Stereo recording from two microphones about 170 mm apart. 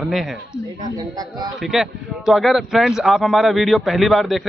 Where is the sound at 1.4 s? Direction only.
Centre (ahead or behind).